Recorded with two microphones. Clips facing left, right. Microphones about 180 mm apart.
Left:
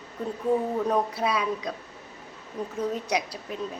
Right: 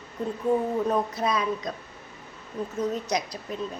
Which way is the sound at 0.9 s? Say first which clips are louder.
Even; 10° left (ahead or behind).